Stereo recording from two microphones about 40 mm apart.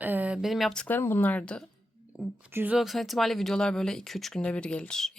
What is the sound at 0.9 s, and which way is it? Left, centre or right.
Speech, left.